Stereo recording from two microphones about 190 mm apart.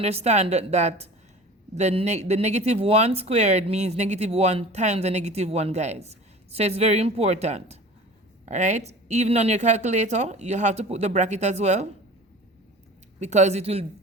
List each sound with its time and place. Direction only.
0.0 s speech: 35° right (ahead or behind)
13.1 s speech: 35° right (ahead or behind)